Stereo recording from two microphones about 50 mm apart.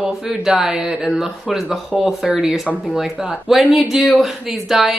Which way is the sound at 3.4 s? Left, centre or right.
Centre.